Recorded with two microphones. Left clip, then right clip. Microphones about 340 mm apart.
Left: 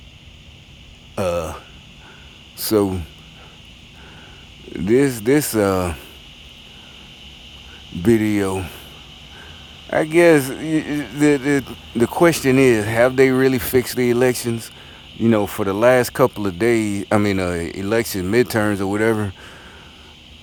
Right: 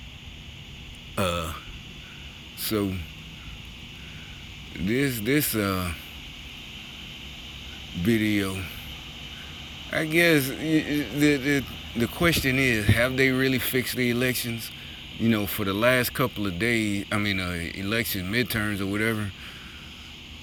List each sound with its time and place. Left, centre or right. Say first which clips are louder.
1.1 s speech: left 6 dB; centre
2.6 s speech: left 10 dB; centre
4.7 s speech: left 10 dB; centre
8.0 s speech: left 8 dB; centre
9.9 s speech: left 8 dB; centre